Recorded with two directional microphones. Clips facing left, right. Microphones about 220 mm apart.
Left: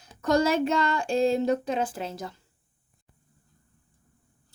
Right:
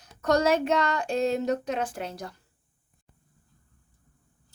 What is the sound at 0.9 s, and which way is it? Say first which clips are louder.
Speech: left 2 dB; 30° left (ahead or behind).